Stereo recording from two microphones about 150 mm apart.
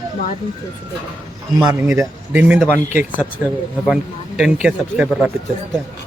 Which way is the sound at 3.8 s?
5° right (ahead or behind).